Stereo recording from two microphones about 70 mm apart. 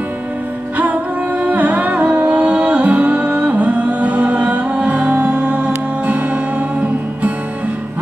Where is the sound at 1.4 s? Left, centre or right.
Right.